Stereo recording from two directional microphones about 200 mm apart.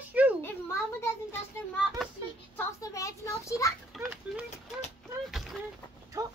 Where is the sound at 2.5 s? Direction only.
15° left (ahead or behind).